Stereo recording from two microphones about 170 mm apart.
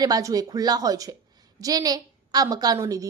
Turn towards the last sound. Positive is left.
turn(degrees=-20)  # may be behind; listen again after turning